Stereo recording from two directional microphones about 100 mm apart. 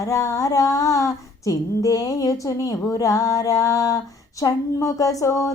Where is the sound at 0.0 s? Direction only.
35° left (ahead or behind).